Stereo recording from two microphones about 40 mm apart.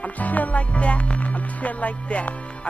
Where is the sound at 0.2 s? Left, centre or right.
Left.